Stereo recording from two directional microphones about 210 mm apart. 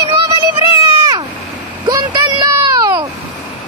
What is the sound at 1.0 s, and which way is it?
Vehicle, 20° right (ahead or behind).